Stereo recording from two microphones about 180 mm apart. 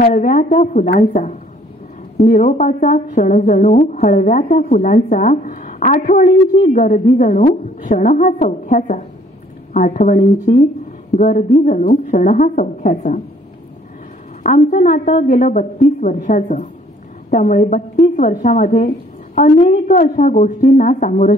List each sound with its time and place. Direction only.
0.0 s a woman's voice: 45° left (ahead or behind)
14.4 s a woman's voice: 45° left (ahead or behind)